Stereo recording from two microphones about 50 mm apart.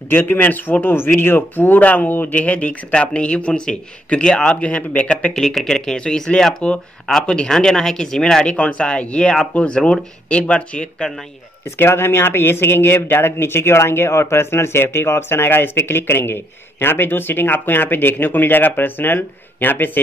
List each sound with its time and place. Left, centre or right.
0.1 s speech: left
5.3 s speech: centre
11.8 s speech: left